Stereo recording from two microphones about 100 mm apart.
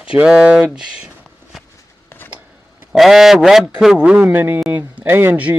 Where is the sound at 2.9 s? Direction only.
Centre (ahead or behind).